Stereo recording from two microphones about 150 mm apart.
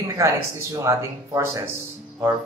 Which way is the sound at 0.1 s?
20° right (ahead or behind).